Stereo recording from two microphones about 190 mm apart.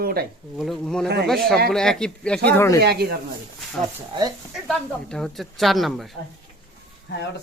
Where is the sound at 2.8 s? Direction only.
55° right (ahead or behind).